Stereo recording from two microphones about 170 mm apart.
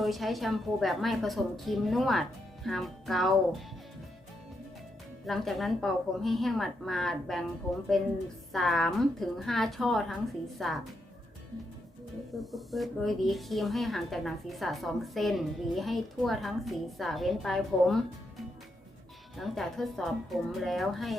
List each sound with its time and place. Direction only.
0.0 s speech: centre (ahead or behind)
5.2 s speech: centre (ahead or behind)
8.5 s speech: centre (ahead or behind)
12.3 s speech: centre (ahead or behind)